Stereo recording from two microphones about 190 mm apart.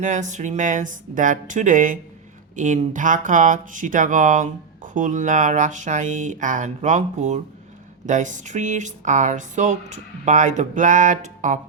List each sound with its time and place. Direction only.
0.0 s speech: 40° right (ahead or behind)